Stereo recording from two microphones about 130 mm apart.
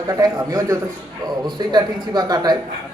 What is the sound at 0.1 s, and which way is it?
A man's voice, 30° right (ahead or behind).